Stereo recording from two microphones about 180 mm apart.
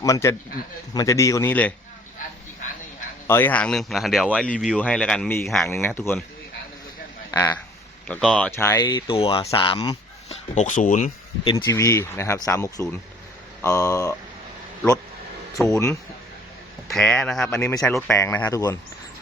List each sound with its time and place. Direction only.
0.0 s speech: 15° left (ahead or behind)
3.2 s speech: 10° left (ahead or behind)
7.3 s a sound: 15° left (ahead or behind)
8.0 s speech: 5° left (ahead or behind); by 10.0 s 25° left (ahead or behind)
10.2 s speech: 40° left (ahead or behind)
11.5 s speech: 15° left (ahead or behind)
15.6 s speech: 15° left (ahead or behind)
16.9 s speech: 5° left (ahead or behind)